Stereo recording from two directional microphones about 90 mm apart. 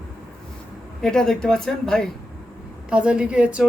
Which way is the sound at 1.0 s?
5° left (ahead or behind).